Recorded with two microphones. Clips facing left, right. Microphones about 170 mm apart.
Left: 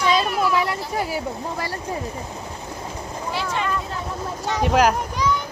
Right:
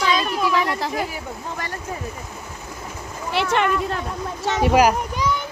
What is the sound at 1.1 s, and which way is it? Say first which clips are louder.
Speech: left 4 dB; 35° left (ahead or behind).